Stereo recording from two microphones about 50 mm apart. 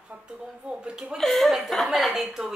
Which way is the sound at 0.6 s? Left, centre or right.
Centre.